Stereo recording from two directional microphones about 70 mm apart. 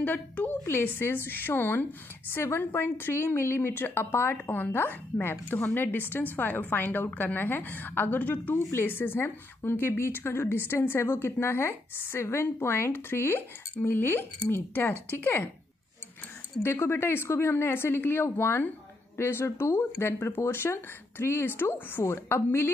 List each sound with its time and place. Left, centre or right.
0.0 s a woman's voice: left
16.6 s a woman's voice: left